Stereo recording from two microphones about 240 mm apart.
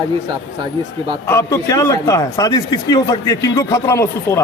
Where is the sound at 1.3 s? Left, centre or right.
Centre.